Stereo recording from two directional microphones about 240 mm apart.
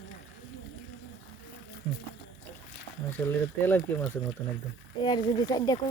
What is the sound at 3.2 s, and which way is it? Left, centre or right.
Speech, centre.